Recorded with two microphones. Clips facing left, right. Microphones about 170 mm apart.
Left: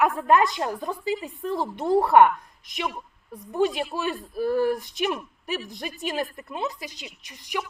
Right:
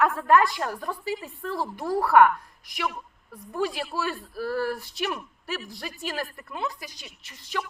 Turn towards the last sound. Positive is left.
turn(degrees=15)  # may be behind; listen again after turning